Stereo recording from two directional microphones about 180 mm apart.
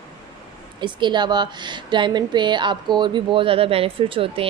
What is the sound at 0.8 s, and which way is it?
A woman's voice, 25° right (ahead or behind).